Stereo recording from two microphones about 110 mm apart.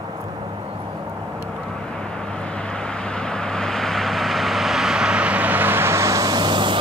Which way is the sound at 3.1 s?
5° left (ahead or behind).